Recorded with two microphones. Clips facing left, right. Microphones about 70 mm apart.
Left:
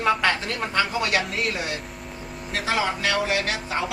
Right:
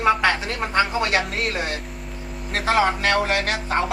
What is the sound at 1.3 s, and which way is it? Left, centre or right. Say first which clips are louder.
Speech: right 2 dB; right.